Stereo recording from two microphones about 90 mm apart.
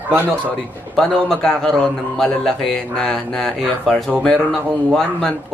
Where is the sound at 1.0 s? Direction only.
10° left (ahead or behind).